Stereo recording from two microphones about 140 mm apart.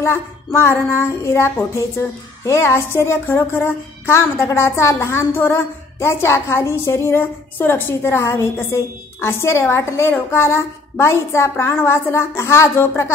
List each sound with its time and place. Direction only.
0.0 s a woman's voice: 20° left (ahead or behind)